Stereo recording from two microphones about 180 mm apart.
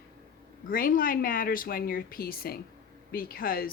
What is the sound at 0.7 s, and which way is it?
Speech, 50° left (ahead or behind).